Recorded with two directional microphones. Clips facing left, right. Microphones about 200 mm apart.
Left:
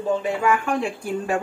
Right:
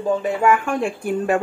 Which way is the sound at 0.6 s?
55° right (ahead or behind).